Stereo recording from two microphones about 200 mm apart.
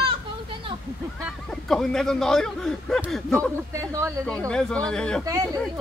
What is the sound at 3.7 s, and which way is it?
Speech, 15° right (ahead or behind).